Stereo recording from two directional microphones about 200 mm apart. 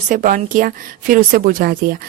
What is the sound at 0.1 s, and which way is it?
A woman's voice, 40° right (ahead or behind).